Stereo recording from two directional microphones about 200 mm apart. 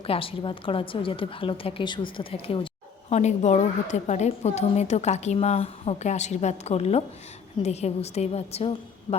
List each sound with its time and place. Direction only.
0.0 s a woman's voice: 30° left (ahead or behind)